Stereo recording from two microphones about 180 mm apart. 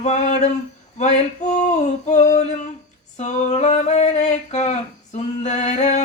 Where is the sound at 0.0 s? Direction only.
40° left (ahead or behind).